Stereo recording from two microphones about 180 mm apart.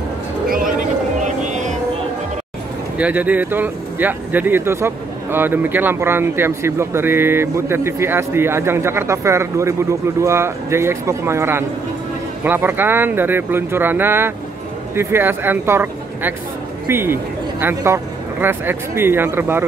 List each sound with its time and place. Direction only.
0.5 s a sound: 50° right (ahead or behind)
1.2 s music: 40° right (ahead or behind)
3.0 s speech: 10° right (ahead or behind)